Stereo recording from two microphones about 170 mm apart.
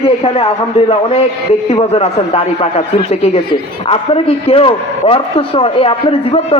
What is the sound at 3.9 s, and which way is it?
A man's voice, 35° left (ahead or behind).